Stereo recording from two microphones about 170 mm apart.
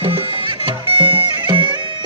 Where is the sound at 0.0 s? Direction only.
35° right (ahead or behind).